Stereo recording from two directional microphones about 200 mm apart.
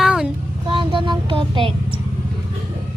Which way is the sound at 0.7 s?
25° right (ahead or behind).